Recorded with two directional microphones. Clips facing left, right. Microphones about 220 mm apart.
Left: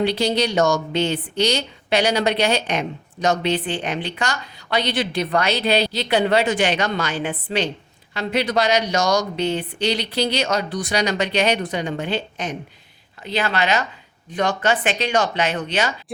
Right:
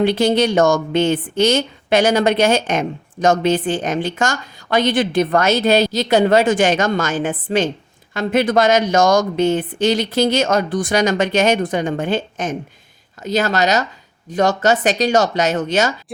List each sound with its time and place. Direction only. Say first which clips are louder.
0.0 s a woman's voice: right 5 dB; 50° right (ahead or behind)